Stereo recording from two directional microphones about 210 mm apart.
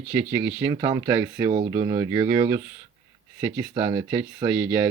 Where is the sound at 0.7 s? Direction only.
20° right (ahead or behind).